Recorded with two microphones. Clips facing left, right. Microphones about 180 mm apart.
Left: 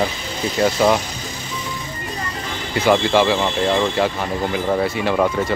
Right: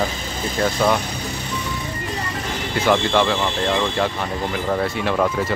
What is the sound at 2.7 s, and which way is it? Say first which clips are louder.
Speech: left 3 dB; 5° left (ahead or behind).